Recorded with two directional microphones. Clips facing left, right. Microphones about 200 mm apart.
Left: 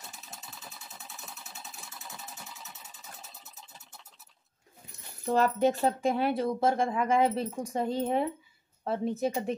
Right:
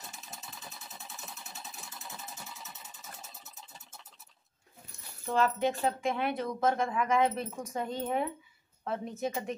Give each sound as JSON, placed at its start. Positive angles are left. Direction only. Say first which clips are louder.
{"t": 0.0, "sound": "engine", "louder": "even", "side_deg": 0}
{"t": 5.2, "sound": "a woman's voice", "louder": "left 4 dB", "side_deg": 40}